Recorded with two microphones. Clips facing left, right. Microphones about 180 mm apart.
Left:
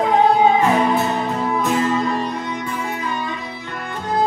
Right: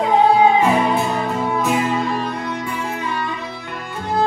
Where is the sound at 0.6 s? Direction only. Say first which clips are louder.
Even; 15° right (ahead or behind).